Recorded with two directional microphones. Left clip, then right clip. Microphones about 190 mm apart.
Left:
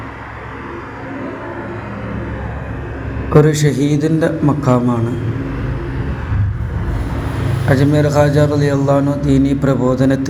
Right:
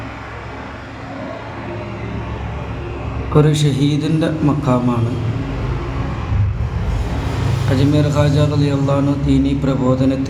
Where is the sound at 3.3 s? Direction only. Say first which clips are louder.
Left 4 dB; 25° left (ahead or behind).